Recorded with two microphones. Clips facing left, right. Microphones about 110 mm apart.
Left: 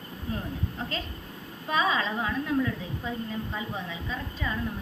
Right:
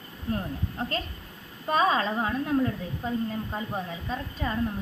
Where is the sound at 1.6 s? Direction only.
45° right (ahead or behind).